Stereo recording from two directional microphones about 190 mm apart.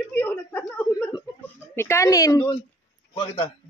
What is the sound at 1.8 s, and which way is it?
Speech, 15° left (ahead or behind).